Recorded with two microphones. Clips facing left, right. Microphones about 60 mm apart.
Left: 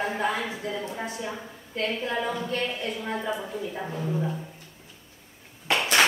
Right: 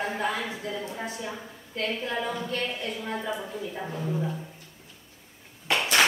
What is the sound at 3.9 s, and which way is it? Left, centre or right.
Speech, centre.